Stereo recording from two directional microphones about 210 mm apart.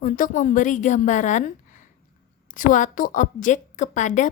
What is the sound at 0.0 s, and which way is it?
A woman's voice, 40° left (ahead or behind).